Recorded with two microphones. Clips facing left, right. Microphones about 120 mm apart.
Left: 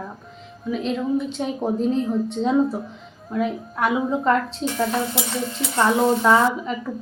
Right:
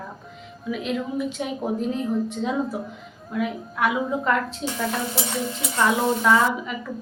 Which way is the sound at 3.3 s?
30° left (ahead or behind).